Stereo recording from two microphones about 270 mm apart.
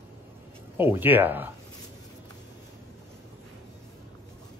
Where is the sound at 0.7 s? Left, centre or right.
Centre.